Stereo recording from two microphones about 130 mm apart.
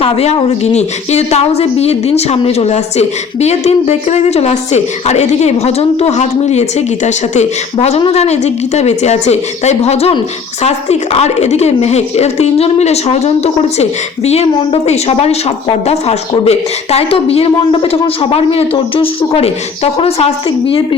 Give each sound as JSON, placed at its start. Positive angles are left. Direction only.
{"t": 0.0, "sound": "a woman's voice", "side_deg": 50}